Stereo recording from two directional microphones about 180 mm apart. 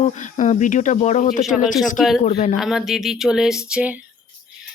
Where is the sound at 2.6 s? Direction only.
Centre (ahead or behind).